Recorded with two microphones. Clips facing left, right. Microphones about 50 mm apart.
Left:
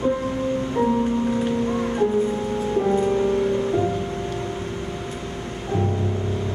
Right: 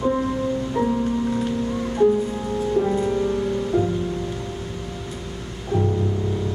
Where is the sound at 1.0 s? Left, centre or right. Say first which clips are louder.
Left 1 dB; left.